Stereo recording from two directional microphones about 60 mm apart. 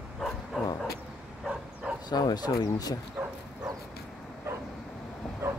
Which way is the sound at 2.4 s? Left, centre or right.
Left.